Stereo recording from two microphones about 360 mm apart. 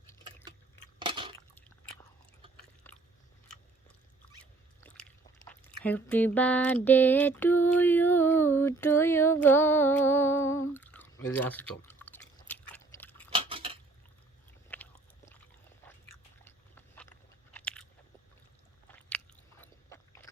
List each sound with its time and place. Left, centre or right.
0.0 s a sound: centre
0.9 s dishes: centre
2.8 s biting: centre
4.8 s speech: centre
10.8 s drip: centre
13.3 s dishes: centre
14.7 s biting: centre
16.4 s biting: centre
18.9 s biting: centre